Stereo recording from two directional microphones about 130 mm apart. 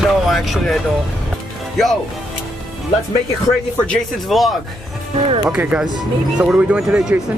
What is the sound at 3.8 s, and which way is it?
Speech, centre (ahead or behind).